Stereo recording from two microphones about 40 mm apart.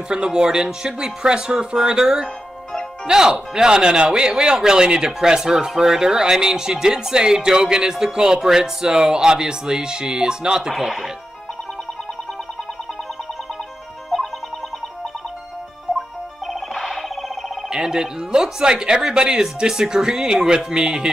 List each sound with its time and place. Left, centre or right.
0.1 s speech: right
17.6 s speech: centre